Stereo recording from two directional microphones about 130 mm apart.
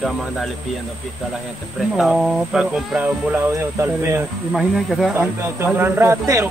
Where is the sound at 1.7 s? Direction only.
Centre (ahead or behind).